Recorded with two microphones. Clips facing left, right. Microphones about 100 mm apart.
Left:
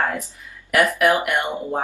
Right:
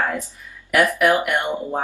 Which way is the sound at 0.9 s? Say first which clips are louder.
Even; 5° left (ahead or behind).